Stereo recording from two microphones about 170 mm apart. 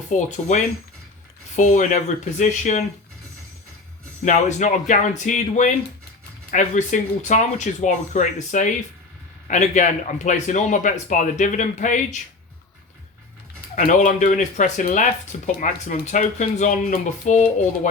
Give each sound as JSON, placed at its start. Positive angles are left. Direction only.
{"t": 0.1, "sound": "speech", "side_deg": 45}
{"t": 4.3, "sound": "speech", "side_deg": 45}
{"t": 13.7, "sound": "speech", "side_deg": 50}